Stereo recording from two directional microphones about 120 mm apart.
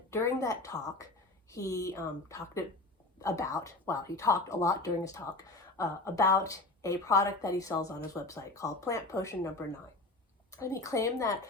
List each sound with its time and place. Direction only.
0.1 s speech: 25° left (ahead or behind)